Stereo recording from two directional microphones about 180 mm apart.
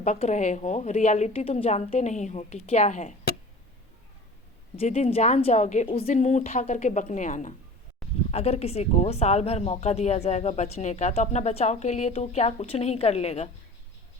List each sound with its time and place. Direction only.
0.0 s speech: 40° left (ahead or behind)
4.8 s speech: 35° left (ahead or behind)